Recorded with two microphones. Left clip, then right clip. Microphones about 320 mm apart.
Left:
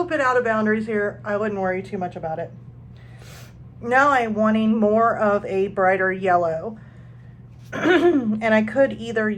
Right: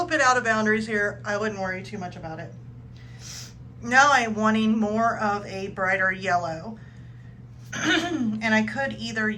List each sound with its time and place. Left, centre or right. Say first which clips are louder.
0.0 s speech: left 1 dB; centre
7.7 s speech: left 7 dB; centre